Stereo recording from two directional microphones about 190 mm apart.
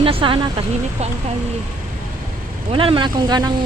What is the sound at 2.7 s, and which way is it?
Speech, 25° right (ahead or behind).